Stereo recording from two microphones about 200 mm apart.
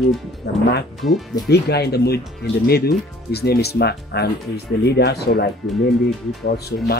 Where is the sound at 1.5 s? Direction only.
55° left (ahead or behind).